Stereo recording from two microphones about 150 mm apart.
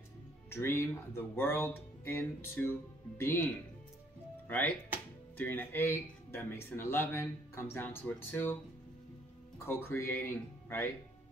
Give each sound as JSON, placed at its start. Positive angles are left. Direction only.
{"t": 0.5, "sound": "speech", "side_deg": 15}
{"t": 4.5, "sound": "speech", "side_deg": 10}
{"t": 9.7, "sound": "speech", "side_deg": 15}